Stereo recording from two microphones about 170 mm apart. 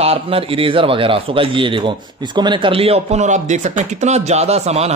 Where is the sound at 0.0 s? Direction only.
35° right (ahead or behind).